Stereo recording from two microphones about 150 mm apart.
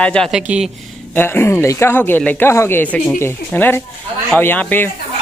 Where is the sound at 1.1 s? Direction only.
15° left (ahead or behind).